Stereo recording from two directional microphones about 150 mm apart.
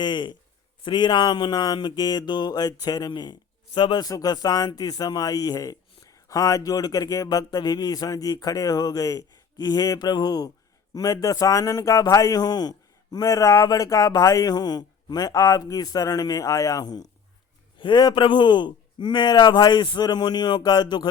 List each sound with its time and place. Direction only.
0.0 s a man's voice: 30° left (ahead or behind)